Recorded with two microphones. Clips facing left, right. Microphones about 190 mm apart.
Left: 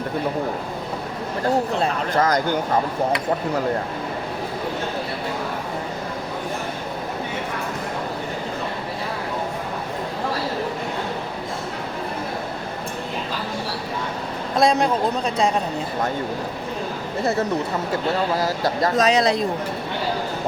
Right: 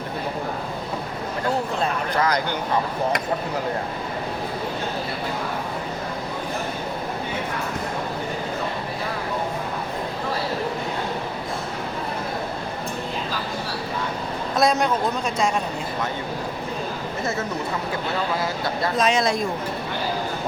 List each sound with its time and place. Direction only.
1.8 s speech: 45° left (ahead or behind)
14.5 s a woman's voice: 30° left (ahead or behind)
18.3 s speech: 40° left (ahead or behind)